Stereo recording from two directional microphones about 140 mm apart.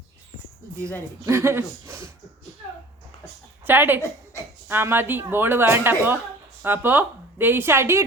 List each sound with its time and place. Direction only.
1.2 s speech: 20° right (ahead or behind)
3.7 s speech: 15° right (ahead or behind)
4.3 s a sound: 20° left (ahead or behind)
4.7 s a woman's voice: 15° right (ahead or behind)